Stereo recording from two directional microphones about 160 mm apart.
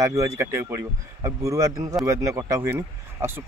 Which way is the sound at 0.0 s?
20° right (ahead or behind).